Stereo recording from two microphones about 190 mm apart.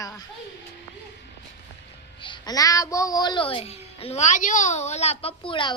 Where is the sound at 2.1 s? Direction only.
25° left (ahead or behind).